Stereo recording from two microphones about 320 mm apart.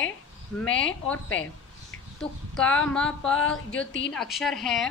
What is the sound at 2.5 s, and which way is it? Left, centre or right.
Speech, centre.